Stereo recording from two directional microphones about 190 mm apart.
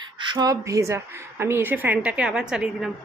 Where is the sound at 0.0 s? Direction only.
25° right (ahead or behind).